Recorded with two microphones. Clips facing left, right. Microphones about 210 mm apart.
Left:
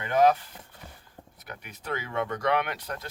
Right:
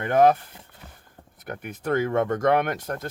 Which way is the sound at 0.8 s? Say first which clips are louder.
Even; 10° left (ahead or behind).